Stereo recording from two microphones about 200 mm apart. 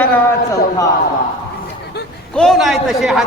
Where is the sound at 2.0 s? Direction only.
55° left (ahead or behind).